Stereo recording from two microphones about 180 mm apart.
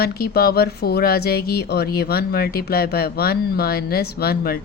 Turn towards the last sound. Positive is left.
turn(degrees=60)  # may be behind; listen again after turning